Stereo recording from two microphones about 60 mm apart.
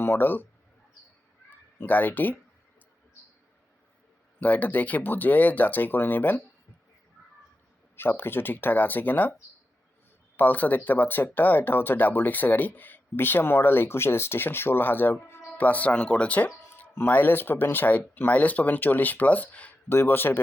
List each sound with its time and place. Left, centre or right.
0.0 s speech: left
1.5 s cat: left
4.4 s speech: left
7.9 s speech: left
10.3 s speech: left
17.1 s speech: left
19.9 s speech: left